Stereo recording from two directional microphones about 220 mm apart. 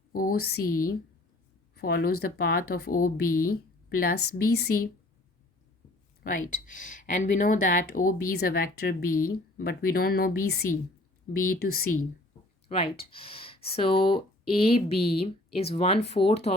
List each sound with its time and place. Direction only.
0.1 s a woman's voice: 40° left (ahead or behind)
6.7 s a woman's voice: 35° left (ahead or behind)
12.6 s speech: 25° left (ahead or behind)